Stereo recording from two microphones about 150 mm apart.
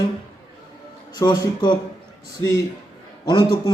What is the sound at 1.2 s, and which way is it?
Speech, 30° left (ahead or behind).